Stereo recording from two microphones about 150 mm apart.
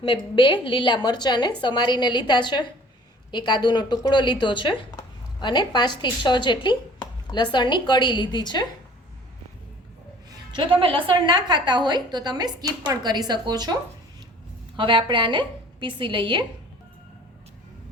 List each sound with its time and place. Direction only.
0.0 s a woman's voice: 35° left (ahead or behind)
10.5 s a woman's voice: 35° right (ahead or behind)
14.8 s a woman's voice: 30° right (ahead or behind)